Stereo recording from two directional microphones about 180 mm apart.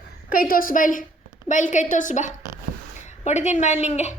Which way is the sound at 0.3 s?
50° left (ahead or behind).